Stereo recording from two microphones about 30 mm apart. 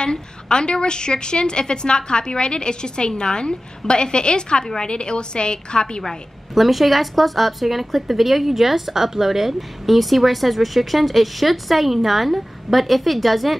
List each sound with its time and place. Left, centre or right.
0.0 s a woman's voice: left
6.5 s speech: centre